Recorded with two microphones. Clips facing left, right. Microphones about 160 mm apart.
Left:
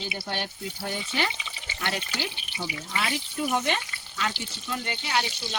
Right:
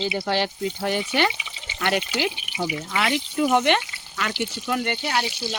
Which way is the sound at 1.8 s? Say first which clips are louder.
Right 8 dB; 70° right (ahead or behind).